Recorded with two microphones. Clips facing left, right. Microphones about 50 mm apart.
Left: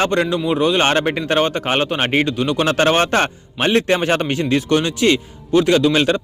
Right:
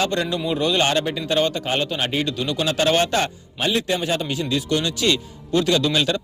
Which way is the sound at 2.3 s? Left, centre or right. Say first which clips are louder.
Left 5 dB; left.